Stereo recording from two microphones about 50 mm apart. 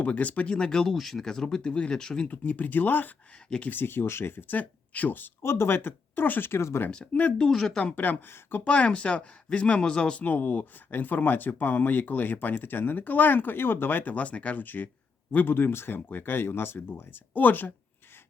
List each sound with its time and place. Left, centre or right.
0.0 s speech: left; by 2.2 s centre
2.2 s speech: left
4.5 s speech: left
5.4 s speech: left
6.5 s speech: left
6.9 s speech: centre
7.9 s speech: left
8.6 s speech: left
10.2 s speech: left
17.3 s speech: left